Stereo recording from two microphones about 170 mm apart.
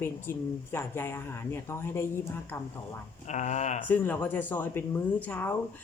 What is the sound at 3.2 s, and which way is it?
Speech, 45° left (ahead or behind).